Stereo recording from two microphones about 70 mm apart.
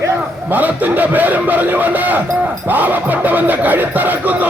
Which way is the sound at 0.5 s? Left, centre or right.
Right.